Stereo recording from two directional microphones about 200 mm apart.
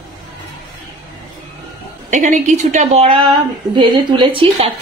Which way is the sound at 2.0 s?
40° right (ahead or behind).